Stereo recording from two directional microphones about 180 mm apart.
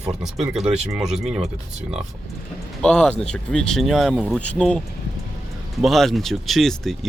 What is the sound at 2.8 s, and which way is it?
Speech, 5° left (ahead or behind).